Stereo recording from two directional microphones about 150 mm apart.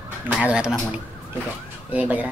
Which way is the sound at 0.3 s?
10° right (ahead or behind).